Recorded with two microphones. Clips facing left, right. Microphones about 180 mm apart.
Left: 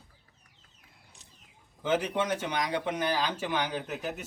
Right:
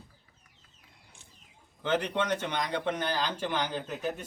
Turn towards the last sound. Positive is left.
turn(degrees=10)  # may be behind; listen again after turning